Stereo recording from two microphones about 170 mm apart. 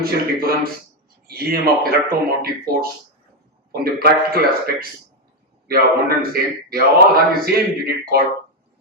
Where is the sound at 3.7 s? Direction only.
65° right (ahead or behind).